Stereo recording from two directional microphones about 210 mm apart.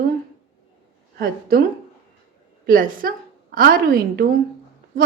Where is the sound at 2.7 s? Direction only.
40° right (ahead or behind).